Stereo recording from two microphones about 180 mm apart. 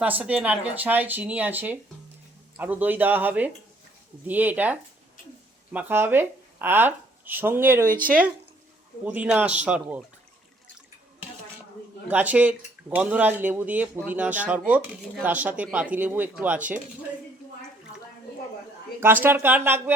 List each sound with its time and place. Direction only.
0.0 s speech: 10° right (ahead or behind)
7.9 s speech: 50° right (ahead or behind)
9.0 s speech: 10° right (ahead or behind)
12.0 s speech: 10° right (ahead or behind)
18.9 s speech: 10° right (ahead or behind)